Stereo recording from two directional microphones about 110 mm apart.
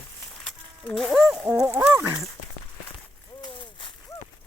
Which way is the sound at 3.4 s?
50° left (ahead or behind).